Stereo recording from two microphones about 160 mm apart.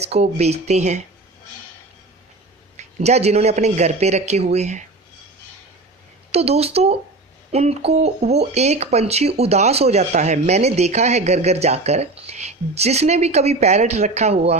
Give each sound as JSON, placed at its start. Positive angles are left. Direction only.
{"t": 0.0, "sound": "speech", "side_deg": -40}
{"t": 2.7, "sound": "speech", "side_deg": -45}
{"t": 6.3, "sound": "speech", "side_deg": -40}